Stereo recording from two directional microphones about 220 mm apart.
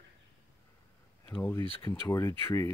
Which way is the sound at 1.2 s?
10° left (ahead or behind).